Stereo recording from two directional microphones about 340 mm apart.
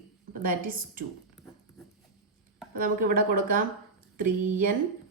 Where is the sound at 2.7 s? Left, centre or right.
Right.